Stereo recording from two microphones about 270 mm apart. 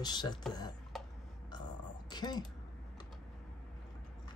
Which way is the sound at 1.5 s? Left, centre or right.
Centre.